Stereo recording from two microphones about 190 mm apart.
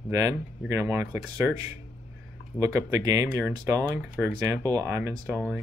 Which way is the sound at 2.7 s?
20° right (ahead or behind).